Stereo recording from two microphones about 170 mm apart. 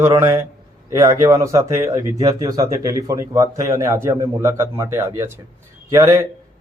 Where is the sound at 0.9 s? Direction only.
15° right (ahead or behind).